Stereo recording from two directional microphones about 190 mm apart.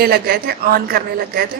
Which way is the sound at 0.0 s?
55° right (ahead or behind).